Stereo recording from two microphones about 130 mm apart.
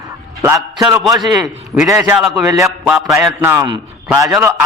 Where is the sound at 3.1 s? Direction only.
20° right (ahead or behind).